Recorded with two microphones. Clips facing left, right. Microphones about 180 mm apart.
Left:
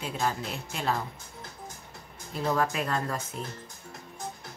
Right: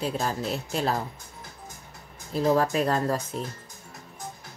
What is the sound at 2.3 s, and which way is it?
Speech, 35° right (ahead or behind).